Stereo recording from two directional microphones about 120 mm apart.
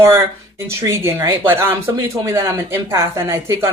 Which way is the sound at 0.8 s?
20° right (ahead or behind).